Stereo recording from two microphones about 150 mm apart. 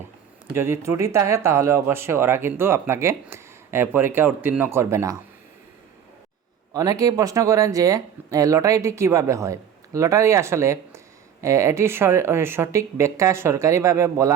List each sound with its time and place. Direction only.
0.5 s speech: 15° right (ahead or behind)
6.7 s speech: 25° right (ahead or behind)